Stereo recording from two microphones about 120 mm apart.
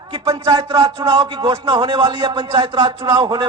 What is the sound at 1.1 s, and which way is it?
A man's voice, 40° right (ahead or behind).